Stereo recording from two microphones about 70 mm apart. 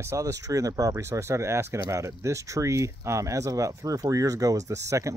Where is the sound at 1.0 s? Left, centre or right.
Right.